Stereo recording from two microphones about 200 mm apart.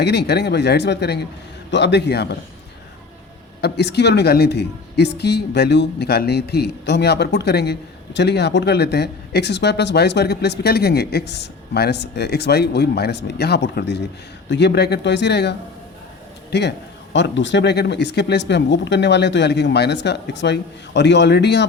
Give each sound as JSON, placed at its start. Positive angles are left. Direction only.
{"t": 0.0, "sound": "a woman's voice", "side_deg": 55}
{"t": 3.6, "sound": "a woman's voice", "side_deg": 55}